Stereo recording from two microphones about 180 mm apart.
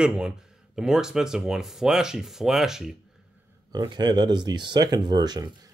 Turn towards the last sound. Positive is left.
turn(degrees=-25)  # may be behind; listen again after turning